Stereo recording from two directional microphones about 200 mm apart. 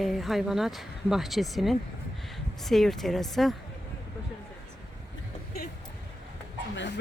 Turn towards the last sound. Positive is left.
turn(degrees=60)  # may be behind; listen again after turning